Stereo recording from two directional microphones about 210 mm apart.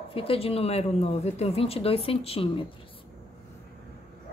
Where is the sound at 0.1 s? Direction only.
25° left (ahead or behind).